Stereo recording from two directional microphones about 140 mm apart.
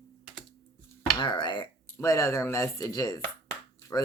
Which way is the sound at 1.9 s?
20° left (ahead or behind).